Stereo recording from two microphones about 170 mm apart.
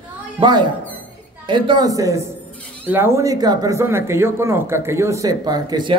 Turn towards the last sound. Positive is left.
turn(degrees=-25)  # may be behind; listen again after turning